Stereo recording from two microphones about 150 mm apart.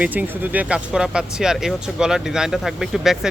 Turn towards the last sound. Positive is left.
turn(degrees=-5)  # may be behind; listen again after turning